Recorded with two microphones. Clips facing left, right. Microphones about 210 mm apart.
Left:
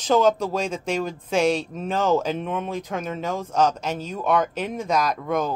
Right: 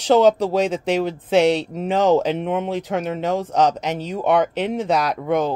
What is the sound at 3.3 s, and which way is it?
Speech, 15° right (ahead or behind).